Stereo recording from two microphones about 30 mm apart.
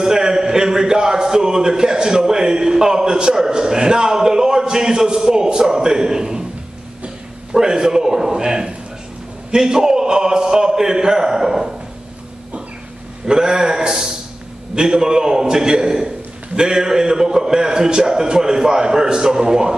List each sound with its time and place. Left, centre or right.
0.0 s speech: right
7.5 s a man's voice: right
13.3 s speech: right